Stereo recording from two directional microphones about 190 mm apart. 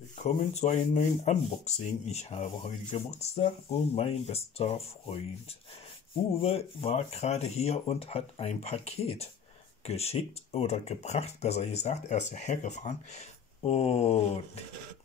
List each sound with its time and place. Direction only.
0.2 s speech: 40° left (ahead or behind)